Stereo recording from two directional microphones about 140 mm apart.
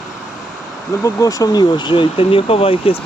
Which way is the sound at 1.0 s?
25° left (ahead or behind).